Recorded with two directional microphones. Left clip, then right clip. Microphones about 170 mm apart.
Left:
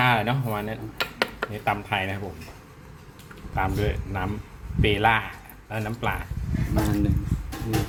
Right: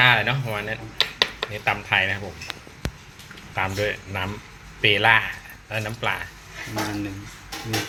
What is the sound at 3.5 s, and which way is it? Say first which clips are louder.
Speech: right 2 dB; 15° left (ahead or behind).